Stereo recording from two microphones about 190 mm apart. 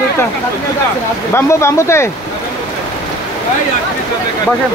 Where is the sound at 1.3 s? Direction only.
15° left (ahead or behind).